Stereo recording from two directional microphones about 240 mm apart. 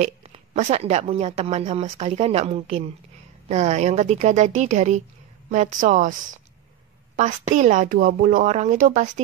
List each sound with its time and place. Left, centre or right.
0.0 s a woman's voice: right
7.2 s speech: right